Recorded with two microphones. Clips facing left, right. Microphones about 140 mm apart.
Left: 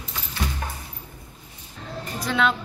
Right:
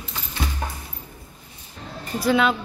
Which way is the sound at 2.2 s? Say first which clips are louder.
Right 4 dB; 5° right (ahead or behind).